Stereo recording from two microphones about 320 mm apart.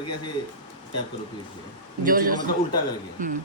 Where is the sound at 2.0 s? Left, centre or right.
Right.